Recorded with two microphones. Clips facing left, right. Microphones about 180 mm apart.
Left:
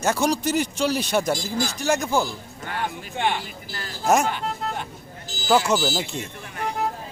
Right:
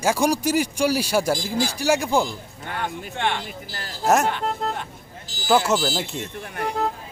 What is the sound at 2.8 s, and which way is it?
Speech, 10° left (ahead or behind).